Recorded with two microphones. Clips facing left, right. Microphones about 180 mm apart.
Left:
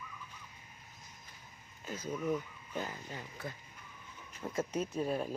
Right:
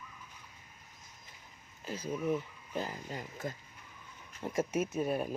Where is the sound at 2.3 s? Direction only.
35° right (ahead or behind).